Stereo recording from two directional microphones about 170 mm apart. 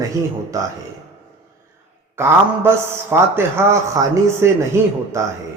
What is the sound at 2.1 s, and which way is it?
A man's voice, 15° right (ahead or behind).